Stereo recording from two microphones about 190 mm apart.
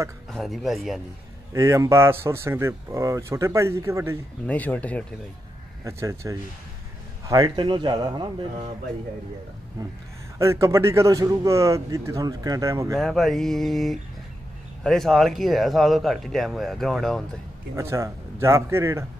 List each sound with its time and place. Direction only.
0.3 s speech: centre (ahead or behind)
1.5 s speech: 15° right (ahead or behind)
4.5 s speech: 10° left (ahead or behind)
5.9 s a man's voice: 15° right (ahead or behind)
9.8 s a man's voice: 20° right (ahead or behind)
12.9 s speech: centre (ahead or behind)
17.7 s speech: 15° right (ahead or behind)